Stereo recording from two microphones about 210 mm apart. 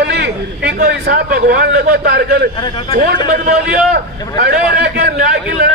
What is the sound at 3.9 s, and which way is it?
A man's voice, 50° right (ahead or behind).